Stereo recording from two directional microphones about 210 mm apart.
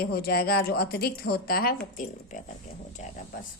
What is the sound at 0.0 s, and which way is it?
A woman's voice, 50° left (ahead or behind).